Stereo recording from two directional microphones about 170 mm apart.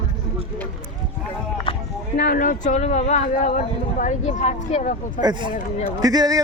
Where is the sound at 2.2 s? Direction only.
55° left (ahead or behind).